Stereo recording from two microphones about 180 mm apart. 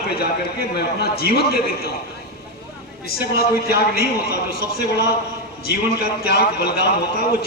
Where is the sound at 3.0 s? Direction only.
60° left (ahead or behind).